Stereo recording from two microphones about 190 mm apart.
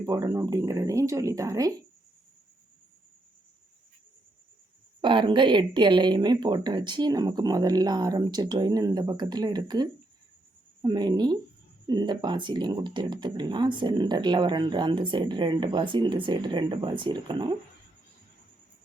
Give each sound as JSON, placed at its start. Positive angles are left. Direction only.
{"t": 0.0, "sound": "speech", "side_deg": -20}
{"t": 4.9, "sound": "speech", "side_deg": -25}